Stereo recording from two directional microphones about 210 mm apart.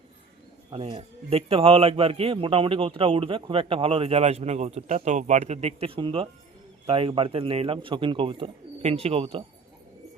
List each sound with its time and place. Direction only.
0.7 s a man's voice: 25° right (ahead or behind)